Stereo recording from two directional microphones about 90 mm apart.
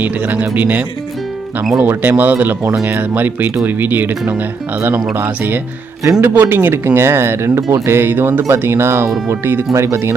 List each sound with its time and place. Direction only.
0.0 s speech: 20° right (ahead or behind)